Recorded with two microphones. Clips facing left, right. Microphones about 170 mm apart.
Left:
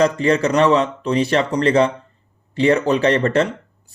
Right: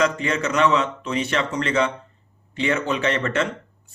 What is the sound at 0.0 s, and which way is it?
Speech, 35° left (ahead or behind).